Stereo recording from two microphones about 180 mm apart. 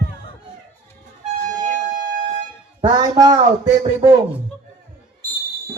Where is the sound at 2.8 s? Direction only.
25° right (ahead or behind).